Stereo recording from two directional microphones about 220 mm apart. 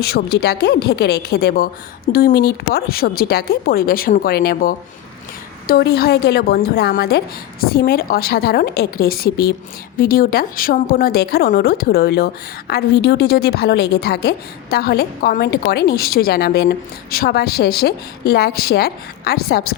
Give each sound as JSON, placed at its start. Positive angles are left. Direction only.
{"t": 0.0, "sound": "speech", "side_deg": 45}